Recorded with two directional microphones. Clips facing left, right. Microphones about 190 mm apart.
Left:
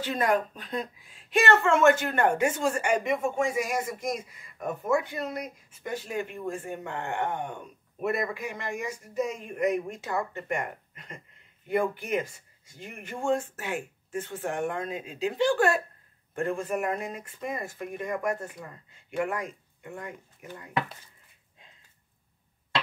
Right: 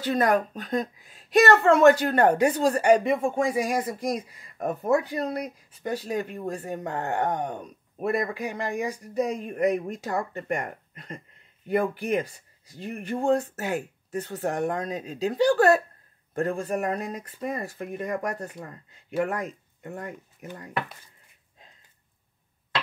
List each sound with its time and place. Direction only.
0.0 s speech: 40° right (ahead or behind)